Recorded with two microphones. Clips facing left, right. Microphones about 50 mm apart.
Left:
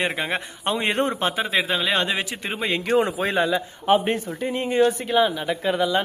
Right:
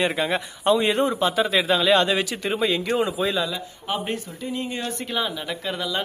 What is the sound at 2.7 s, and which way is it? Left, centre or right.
Speech, left.